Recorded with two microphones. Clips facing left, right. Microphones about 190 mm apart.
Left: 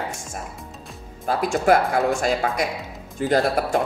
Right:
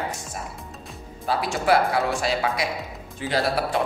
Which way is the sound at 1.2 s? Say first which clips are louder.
Left 3 dB; 45° left (ahead or behind).